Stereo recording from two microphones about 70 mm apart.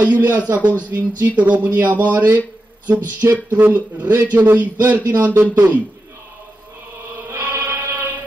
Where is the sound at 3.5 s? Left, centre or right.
Right.